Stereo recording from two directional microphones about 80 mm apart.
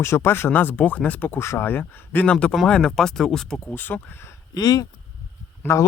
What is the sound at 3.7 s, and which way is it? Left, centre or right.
Speech, left.